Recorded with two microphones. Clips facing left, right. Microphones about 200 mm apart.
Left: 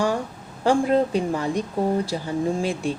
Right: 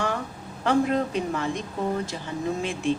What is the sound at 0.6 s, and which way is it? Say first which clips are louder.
A woman's voice: left 3 dB; 30° left (ahead or behind).